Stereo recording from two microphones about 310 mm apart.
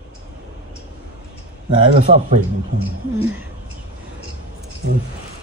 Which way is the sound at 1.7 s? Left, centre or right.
Centre.